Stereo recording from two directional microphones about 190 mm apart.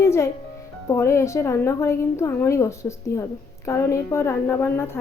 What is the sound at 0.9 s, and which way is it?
A woman's voice, 15° left (ahead or behind).